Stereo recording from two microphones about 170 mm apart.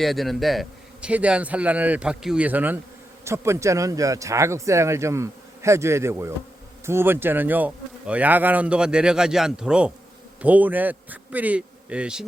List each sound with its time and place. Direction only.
0.0 s a man's voice: centre (ahead or behind)